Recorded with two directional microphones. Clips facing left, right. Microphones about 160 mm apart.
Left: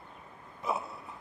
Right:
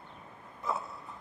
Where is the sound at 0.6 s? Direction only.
20° left (ahead or behind).